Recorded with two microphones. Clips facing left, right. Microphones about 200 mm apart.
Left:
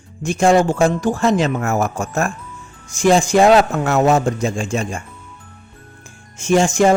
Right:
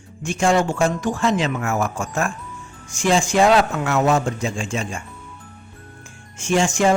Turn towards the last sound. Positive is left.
turn(degrees=45)  # may be behind; listen again after turning